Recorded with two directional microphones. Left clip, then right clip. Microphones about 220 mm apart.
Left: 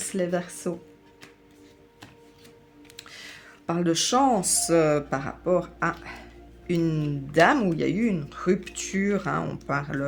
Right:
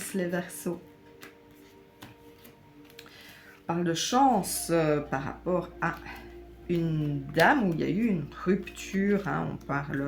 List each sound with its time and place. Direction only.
0.2 s speech: 40° left (ahead or behind)
2.9 s speech: 45° left (ahead or behind)